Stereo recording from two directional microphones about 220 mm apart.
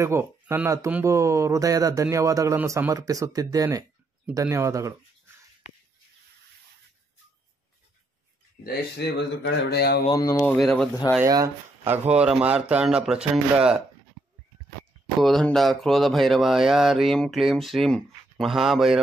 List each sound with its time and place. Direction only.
0.0 s speech: 10° right (ahead or behind)
8.6 s a man's voice: 50° left (ahead or behind)
10.0 s speech: 15° left (ahead or behind)
10.5 s speech: centre (ahead or behind)
11.1 s speech: 15° right (ahead or behind)
15.1 s speech: centre (ahead or behind)